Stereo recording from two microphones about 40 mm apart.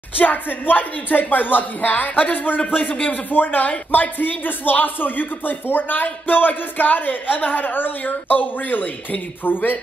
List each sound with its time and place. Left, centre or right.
0.2 s speech: left